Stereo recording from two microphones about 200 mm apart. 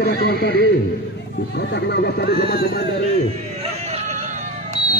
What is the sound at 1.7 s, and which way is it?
Speech, 55° left (ahead or behind).